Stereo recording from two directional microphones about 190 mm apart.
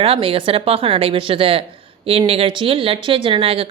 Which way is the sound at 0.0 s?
30° right (ahead or behind).